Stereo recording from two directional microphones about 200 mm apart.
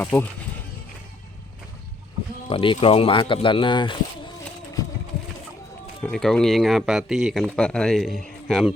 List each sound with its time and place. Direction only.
0.0 s speech: 5° left (ahead or behind)
2.5 s speech: 25° left (ahead or behind)
6.0 s speech: 5° left (ahead or behind)